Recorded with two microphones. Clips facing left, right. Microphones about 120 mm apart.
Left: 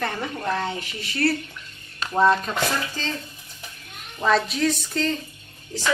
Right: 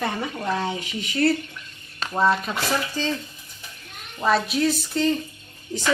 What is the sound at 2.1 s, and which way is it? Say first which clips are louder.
Speech: left 2 dB; centre (ahead or behind).